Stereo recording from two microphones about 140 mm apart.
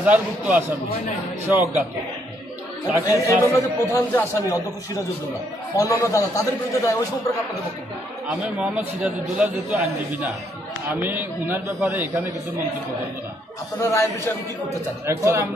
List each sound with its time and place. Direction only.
0.0 s a man's voice: 10° right (ahead or behind)
3.0 s speech: 25° left (ahead or behind)
5.8 s speech: 25° left (ahead or behind)
8.3 s a man's voice: 5° right (ahead or behind)
13.8 s speech: 20° left (ahead or behind)
15.0 s speech: 20° right (ahead or behind)